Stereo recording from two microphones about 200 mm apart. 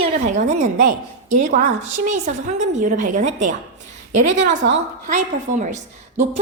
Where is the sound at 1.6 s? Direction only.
35° right (ahead or behind).